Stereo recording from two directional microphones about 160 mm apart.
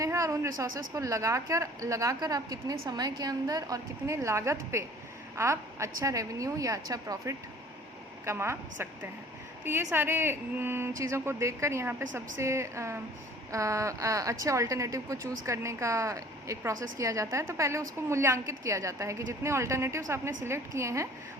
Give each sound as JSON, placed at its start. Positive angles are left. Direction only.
{"t": 0.0, "sound": "a woman's voice", "side_deg": -20}
{"t": 9.9, "sound": "a woman's voice", "side_deg": -15}